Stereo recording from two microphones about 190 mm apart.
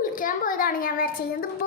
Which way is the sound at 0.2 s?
45° left (ahead or behind).